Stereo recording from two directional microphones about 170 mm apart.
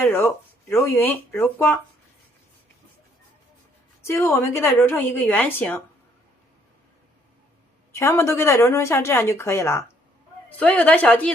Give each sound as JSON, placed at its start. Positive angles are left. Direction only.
{"t": 0.0, "sound": "speech", "side_deg": 15}
{"t": 4.0, "sound": "speech", "side_deg": 15}
{"t": 7.9, "sound": "speech", "side_deg": 15}